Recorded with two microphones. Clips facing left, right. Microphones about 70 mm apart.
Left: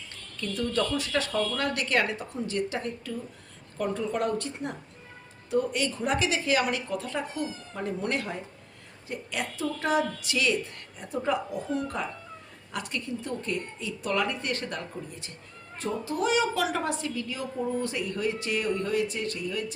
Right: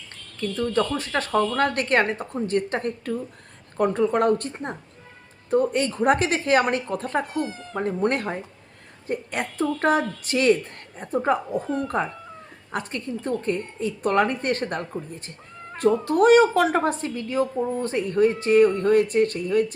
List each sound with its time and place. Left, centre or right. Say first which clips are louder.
0.3 s a woman's voice: right 5 dB; right
15.7 s speech: right 11 dB; right